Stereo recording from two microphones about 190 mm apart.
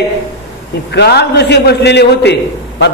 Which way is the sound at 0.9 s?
60° left (ahead or behind).